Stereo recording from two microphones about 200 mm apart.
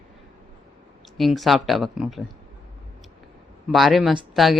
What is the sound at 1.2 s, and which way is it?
Speech, centre (ahead or behind).